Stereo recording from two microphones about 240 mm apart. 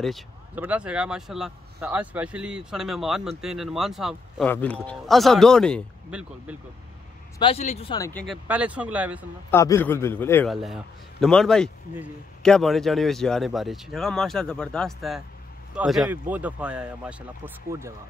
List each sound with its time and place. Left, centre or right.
0.0 s speech: centre
7.3 s speech: left
8.1 s speech: centre
8.5 s speech: centre
9.5 s a man's voice: centre